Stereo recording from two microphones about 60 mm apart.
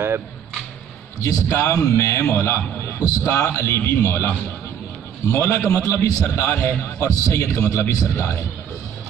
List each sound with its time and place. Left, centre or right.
1.2 s a man's voice: left
5.3 s a man's voice: left
5.8 s a man's voice: left
6.5 s a man's voice: left